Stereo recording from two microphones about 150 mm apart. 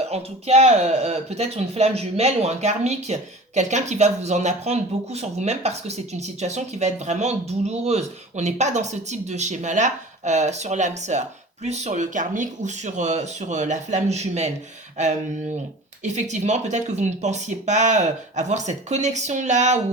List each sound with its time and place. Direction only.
0.1 s speech: 45° right (ahead or behind)
16.0 s speech: 50° right (ahead or behind)